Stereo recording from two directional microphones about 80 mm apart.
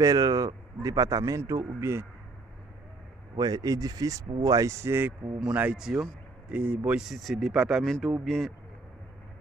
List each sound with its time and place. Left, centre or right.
0.0 s speech: right
3.3 s speech: right
5.4 s speech: centre
7.0 s speech: centre